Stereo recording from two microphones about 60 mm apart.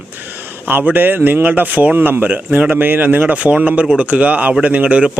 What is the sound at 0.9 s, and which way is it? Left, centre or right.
Speech, right.